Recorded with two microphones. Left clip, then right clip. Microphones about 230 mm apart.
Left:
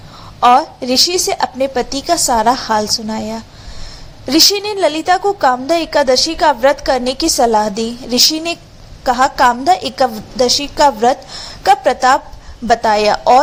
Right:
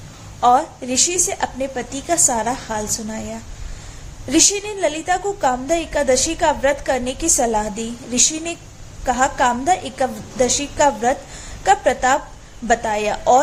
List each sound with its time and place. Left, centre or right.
0.3 s a woman's voice: centre